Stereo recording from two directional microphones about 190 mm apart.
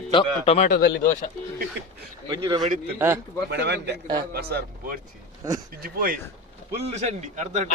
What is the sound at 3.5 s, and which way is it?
Speech, 65° right (ahead or behind).